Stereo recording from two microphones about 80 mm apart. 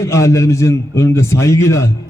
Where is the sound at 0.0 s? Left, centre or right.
Left.